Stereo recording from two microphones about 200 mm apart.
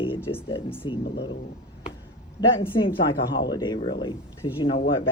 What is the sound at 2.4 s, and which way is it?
Speech, 20° left (ahead or behind).